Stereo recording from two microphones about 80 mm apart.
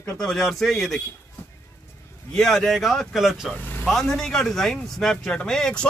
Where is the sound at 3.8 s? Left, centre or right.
Centre.